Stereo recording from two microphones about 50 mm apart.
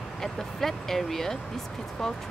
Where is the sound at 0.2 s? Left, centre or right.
Centre.